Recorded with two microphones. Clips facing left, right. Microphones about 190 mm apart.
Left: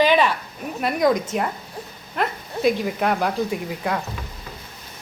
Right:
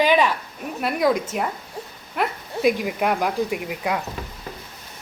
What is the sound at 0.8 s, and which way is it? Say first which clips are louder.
Speech: left 1 dB; 5° right (ahead or behind).